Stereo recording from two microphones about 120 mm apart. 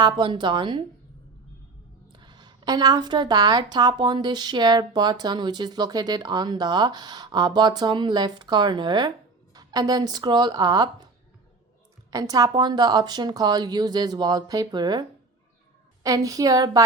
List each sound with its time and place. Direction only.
0.0 s a woman's voice: 40° right (ahead or behind)
2.1 s a woman's voice: 35° right (ahead or behind)
12.1 s a woman's voice: 30° right (ahead or behind)
16.0 s a woman's voice: 30° right (ahead or behind)